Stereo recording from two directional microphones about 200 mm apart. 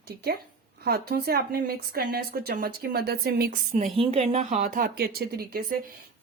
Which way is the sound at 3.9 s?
30° right (ahead or behind).